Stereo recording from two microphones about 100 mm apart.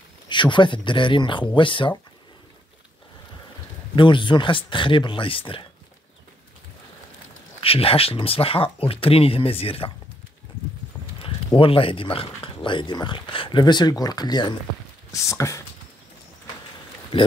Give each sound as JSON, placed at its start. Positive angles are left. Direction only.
{"t": 0.3, "sound": "speech", "side_deg": 50}
{"t": 3.9, "sound": "speech", "side_deg": 55}
{"t": 7.6, "sound": "speech", "side_deg": 70}
{"t": 11.2, "sound": "speech", "side_deg": 65}
{"t": 15.0, "sound": "speech", "side_deg": 30}